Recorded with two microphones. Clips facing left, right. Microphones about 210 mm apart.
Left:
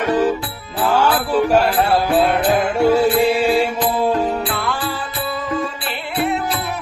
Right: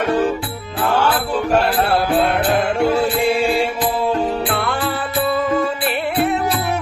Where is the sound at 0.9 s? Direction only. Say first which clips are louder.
Left 3 dB; 10° left (ahead or behind).